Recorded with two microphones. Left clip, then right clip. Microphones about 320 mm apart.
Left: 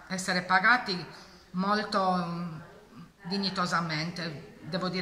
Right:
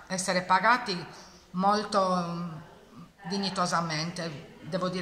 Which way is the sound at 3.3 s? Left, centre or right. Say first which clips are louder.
Even; centre.